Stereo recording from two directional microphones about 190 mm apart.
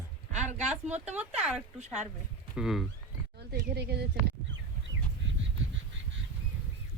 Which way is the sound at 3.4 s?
60° right (ahead or behind).